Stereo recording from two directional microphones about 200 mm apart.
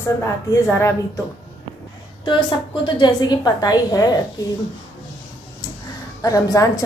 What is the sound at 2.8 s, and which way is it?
A woman's voice, 20° left (ahead or behind).